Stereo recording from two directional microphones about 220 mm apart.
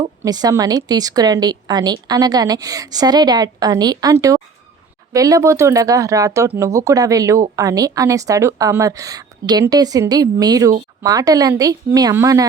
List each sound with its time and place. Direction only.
0.2 s speech: 15° right (ahead or behind)